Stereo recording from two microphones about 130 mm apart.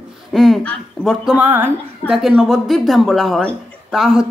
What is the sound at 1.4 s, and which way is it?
Speech, 15° right (ahead or behind).